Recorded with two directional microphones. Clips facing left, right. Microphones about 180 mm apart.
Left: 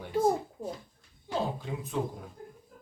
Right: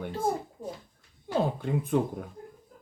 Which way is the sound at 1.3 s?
55° right (ahead or behind).